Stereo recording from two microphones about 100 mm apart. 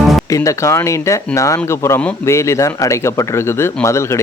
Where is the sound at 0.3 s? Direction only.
30° left (ahead or behind).